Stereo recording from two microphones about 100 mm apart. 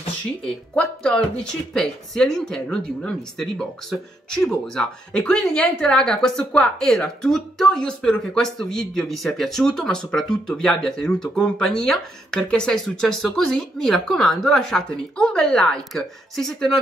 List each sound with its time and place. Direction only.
0.7 s speech: 10° left (ahead or behind)